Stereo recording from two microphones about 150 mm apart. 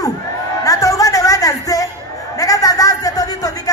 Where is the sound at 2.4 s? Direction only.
25° left (ahead or behind).